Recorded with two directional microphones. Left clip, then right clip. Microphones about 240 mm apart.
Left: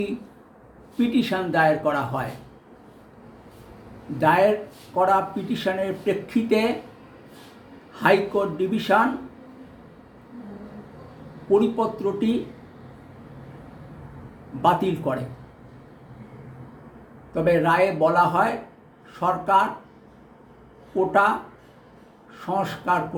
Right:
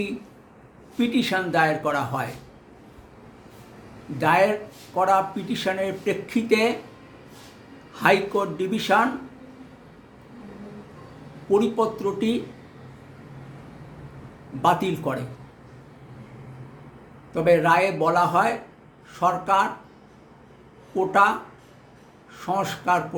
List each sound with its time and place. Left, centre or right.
0.9 s speech: centre
4.2 s speech: centre
7.9 s speech: centre
11.5 s speech: centre
14.6 s speech: centre
17.3 s speech: centre
20.9 s speech: centre
22.4 s speech: centre